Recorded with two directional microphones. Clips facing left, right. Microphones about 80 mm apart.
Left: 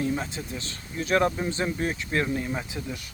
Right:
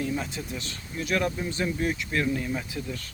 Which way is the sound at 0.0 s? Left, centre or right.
Left.